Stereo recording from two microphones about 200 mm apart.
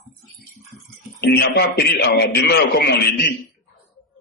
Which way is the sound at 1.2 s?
55° left (ahead or behind).